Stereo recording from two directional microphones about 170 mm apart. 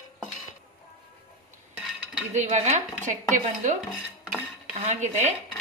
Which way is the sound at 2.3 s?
45° right (ahead or behind).